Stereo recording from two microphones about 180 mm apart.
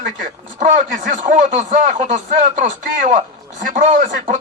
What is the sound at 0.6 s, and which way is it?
Speech, 50° right (ahead or behind).